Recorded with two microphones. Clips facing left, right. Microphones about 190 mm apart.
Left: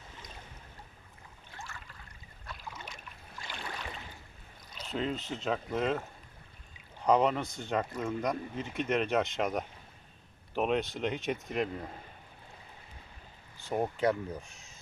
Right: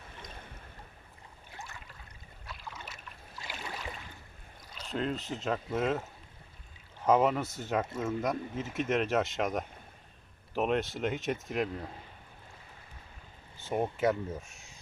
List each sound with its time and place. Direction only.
0.2 s boat: 55° right (ahead or behind)
2.5 s boat: 5° right (ahead or behind)
4.9 s speech: centre (ahead or behind)
7.0 s speech: 5° right (ahead or behind)
13.6 s speech: centre (ahead or behind)